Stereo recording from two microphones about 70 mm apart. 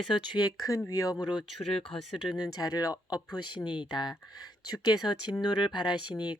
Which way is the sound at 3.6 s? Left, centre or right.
Left.